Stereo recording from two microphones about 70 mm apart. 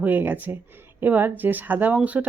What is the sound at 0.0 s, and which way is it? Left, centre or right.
Speech, right.